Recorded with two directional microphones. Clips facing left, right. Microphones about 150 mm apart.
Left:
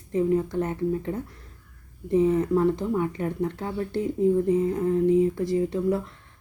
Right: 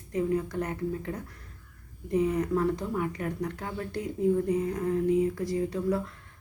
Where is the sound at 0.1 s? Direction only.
25° left (ahead or behind).